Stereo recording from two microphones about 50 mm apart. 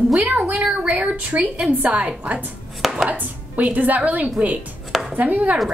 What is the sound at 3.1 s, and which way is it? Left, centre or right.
Speech, right.